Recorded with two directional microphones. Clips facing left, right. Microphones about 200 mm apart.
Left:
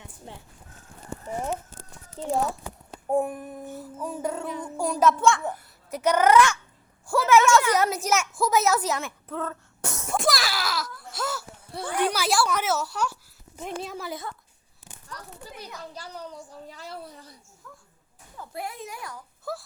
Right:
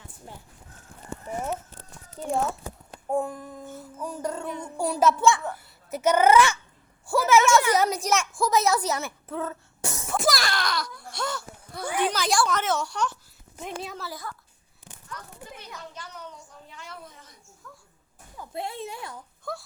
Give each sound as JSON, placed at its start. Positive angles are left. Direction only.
{"t": 2.2, "sound": "speech", "side_deg": 25}
{"t": 3.1, "sound": "speech", "side_deg": 15}
{"t": 3.7, "sound": "music", "side_deg": 0}
{"t": 4.8, "sound": "a child's voice", "side_deg": -5}
{"t": 5.9, "sound": "music", "side_deg": -5}
{"t": 7.1, "sound": "a woman's voice", "side_deg": 0}
{"t": 11.1, "sound": "a sound", "side_deg": 5}
{"t": 11.9, "sound": "speech", "side_deg": 10}
{"t": 13.6, "sound": "music", "side_deg": 0}
{"t": 13.9, "sound": "speech", "side_deg": 20}
{"t": 15.1, "sound": "a sound", "side_deg": 35}
{"t": 17.6, "sound": "a sound", "side_deg": 5}
{"t": 18.5, "sound": "speech", "side_deg": -25}
{"t": 19.5, "sound": "music", "side_deg": 5}